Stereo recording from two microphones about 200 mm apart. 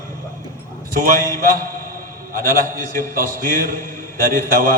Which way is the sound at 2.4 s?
45° right (ahead or behind).